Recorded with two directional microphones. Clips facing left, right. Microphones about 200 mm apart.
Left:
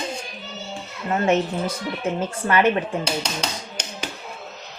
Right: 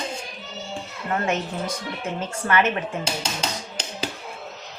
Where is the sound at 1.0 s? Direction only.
25° left (ahead or behind).